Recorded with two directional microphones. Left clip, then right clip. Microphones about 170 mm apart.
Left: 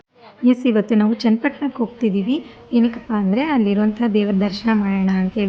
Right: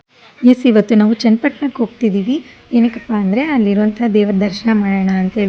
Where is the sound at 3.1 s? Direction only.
10° right (ahead or behind).